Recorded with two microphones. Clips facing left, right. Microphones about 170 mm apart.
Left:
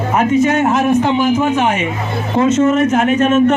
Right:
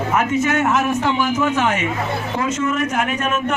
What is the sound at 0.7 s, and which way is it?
A man's voice, 20° left (ahead or behind).